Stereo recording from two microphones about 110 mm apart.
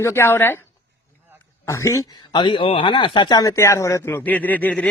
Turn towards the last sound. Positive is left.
turn(degrees=15)  # may be behind; listen again after turning